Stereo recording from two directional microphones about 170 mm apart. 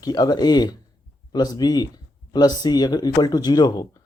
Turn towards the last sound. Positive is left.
turn(degrees=25)  # may be behind; listen again after turning